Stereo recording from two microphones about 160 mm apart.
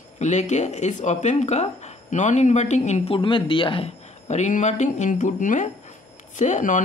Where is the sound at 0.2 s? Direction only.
45° left (ahead or behind).